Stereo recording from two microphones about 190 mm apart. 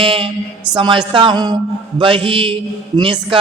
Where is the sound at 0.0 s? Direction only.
30° right (ahead or behind).